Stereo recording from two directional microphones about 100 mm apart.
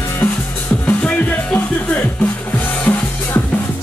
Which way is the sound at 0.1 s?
25° left (ahead or behind).